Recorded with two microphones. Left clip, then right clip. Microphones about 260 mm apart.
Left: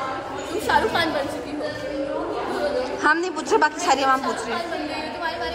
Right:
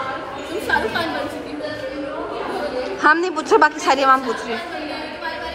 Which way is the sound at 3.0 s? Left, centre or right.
Centre.